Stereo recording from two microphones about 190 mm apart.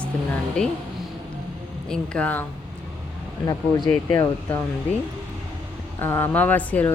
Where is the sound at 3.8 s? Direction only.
20° left (ahead or behind).